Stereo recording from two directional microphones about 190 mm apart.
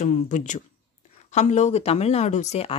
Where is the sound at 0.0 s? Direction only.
40° left (ahead or behind).